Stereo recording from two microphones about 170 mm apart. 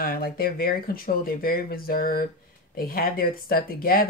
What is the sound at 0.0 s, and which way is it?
A woman's voice, 60° left (ahead or behind).